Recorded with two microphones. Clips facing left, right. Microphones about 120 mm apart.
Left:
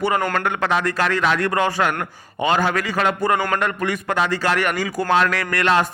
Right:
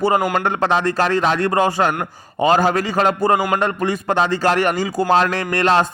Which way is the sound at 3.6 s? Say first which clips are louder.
Right 3 dB; 30° right (ahead or behind).